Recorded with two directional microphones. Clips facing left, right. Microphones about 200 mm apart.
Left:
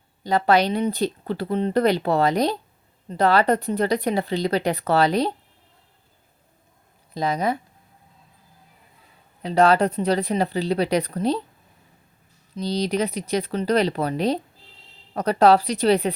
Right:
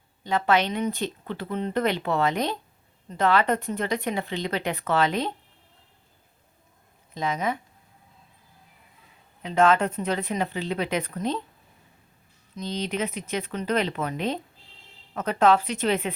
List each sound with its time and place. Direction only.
0.2 s speech: 35° left (ahead or behind)
7.1 s speech: 35° left (ahead or behind)
9.4 s speech: 35° left (ahead or behind)
12.5 s speech: 35° left (ahead or behind)